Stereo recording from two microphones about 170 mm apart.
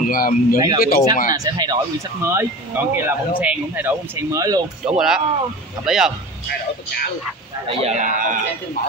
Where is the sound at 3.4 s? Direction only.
10° right (ahead or behind).